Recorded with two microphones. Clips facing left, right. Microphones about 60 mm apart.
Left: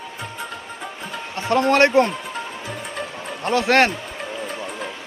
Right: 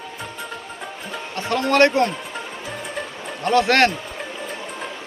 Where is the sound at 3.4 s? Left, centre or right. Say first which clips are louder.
Right 1 dB; centre.